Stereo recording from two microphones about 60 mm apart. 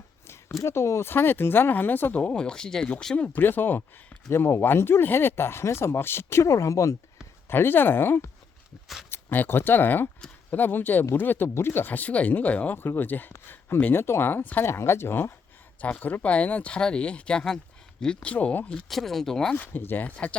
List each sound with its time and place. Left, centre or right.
0.6 s speech: left
1.1 s speech: left
2.1 s speech: centre
3.2 s speech: left
3.4 s speech: left
4.3 s speech: left
7.4 s speech: left
9.3 s speech: left
13.3 s speech: left
14.6 s speech: left
15.8 s speech: left
18.9 s speech: centre
19.5 s speech: left